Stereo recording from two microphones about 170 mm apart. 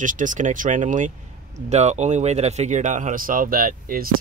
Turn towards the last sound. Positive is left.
turn(degrees=-55)  # may be behind; listen again after turning